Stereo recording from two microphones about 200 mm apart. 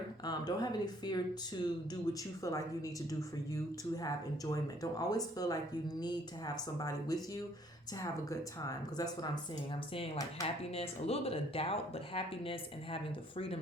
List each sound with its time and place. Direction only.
0.3 s a woman's voice: 20° left (ahead or behind)
10.6 s speech: 30° left (ahead or behind)